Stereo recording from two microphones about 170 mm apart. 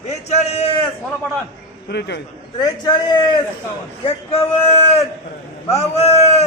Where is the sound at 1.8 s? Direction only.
85° left.